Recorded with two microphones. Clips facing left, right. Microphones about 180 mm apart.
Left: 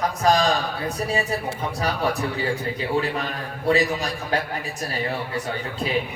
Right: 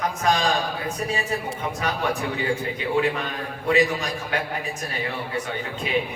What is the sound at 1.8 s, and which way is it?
A man's voice, 35° left (ahead or behind).